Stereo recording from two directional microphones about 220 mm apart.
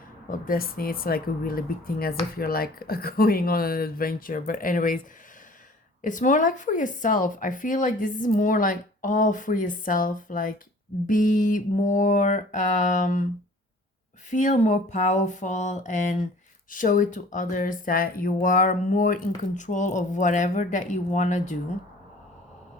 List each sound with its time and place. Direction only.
0.3 s speech: 40° left (ahead or behind)
6.0 s speech: 35° left (ahead or behind)
14.3 s speech: 35° left (ahead or behind)